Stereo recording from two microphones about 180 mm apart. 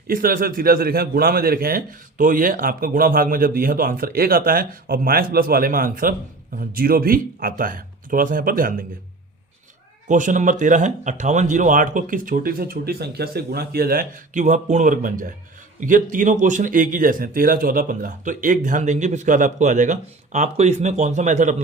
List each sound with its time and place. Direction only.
0.1 s a man's voice: 55° right (ahead or behind)
10.1 s a man's voice: 45° right (ahead or behind)